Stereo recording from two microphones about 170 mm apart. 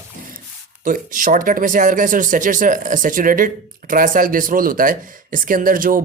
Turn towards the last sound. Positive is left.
turn(degrees=-55)  # may be behind; listen again after turning